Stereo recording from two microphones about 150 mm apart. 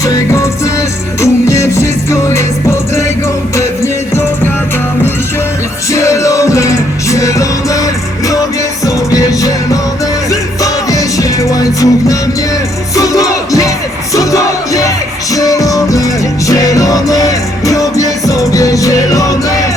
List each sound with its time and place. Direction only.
0.0 s music: 20° left (ahead or behind)
5.9 s music: 20° left (ahead or behind)
10.6 s music: 25° left (ahead or behind)